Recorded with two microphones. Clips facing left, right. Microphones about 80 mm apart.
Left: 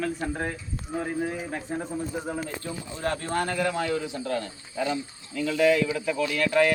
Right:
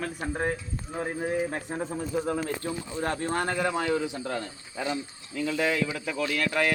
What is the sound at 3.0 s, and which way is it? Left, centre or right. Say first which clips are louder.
Speech: left 1 dB; centre.